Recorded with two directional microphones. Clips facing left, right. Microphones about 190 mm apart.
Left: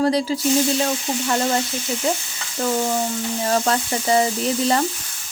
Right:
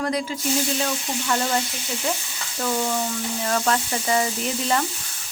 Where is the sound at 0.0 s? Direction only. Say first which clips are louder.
Left 6 dB; 35° left (ahead or behind).